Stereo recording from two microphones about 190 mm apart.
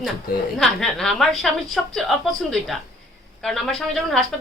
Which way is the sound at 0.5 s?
5° left (ahead or behind).